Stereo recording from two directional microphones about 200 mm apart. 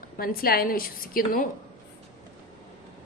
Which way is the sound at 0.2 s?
45° left (ahead or behind).